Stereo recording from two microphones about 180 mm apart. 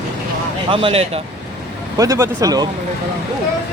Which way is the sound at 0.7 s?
30° right (ahead or behind).